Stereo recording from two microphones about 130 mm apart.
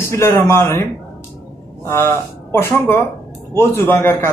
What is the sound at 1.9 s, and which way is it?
Speech, 20° left (ahead or behind).